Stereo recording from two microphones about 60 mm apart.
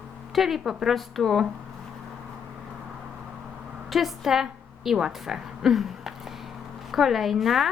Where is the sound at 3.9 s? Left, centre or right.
Centre.